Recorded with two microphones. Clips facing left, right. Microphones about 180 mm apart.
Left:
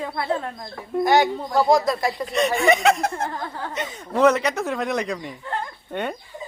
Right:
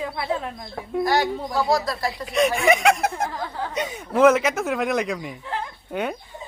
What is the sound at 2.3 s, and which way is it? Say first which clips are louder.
Speech: right 1 dB; centre (ahead or behind).